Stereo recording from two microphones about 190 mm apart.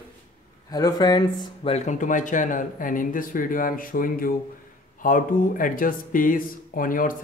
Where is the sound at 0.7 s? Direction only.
20° left (ahead or behind).